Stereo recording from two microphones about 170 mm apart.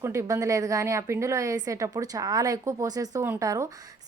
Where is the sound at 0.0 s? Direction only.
15° right (ahead or behind).